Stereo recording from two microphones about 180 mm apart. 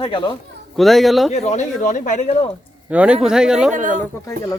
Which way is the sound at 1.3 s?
40° left (ahead or behind).